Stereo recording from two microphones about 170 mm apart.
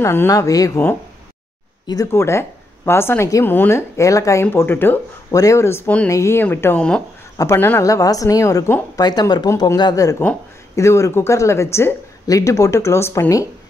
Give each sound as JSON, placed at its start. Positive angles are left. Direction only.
{"t": 0.0, "sound": "a woman's voice", "side_deg": 15}